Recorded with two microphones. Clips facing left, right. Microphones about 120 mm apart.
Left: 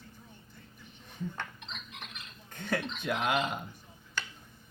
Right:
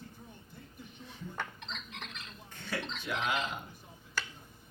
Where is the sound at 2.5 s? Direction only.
50° left (ahead or behind).